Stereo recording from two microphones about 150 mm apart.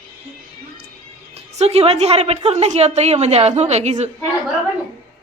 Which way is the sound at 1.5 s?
45° right (ahead or behind).